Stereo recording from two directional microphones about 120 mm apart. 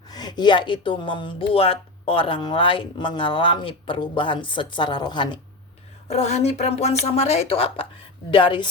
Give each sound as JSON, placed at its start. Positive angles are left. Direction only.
{"t": 0.1, "sound": "speech", "side_deg": 35}
{"t": 6.1, "sound": "speech", "side_deg": 65}